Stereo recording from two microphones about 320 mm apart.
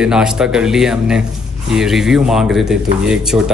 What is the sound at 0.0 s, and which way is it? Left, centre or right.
Speech, centre.